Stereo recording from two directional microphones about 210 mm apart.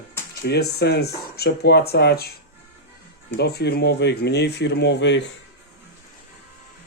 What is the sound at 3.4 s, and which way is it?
Speech, 50° left (ahead or behind).